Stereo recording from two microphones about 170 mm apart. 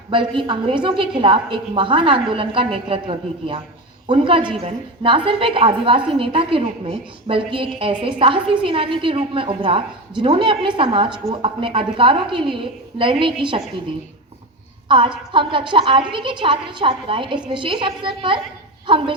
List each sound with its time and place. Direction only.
0.1 s a woman's voice: 30° right (ahead or behind)
14.8 s a woman's voice: 30° right (ahead or behind)